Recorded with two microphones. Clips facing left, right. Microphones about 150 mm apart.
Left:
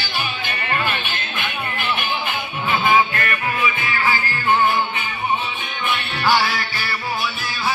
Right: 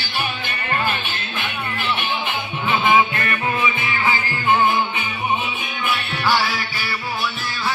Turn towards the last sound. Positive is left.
turn(degrees=0)  # may be behind; listen again after turning